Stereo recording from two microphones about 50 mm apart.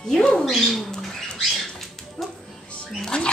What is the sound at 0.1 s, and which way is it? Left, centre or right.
Bird, centre.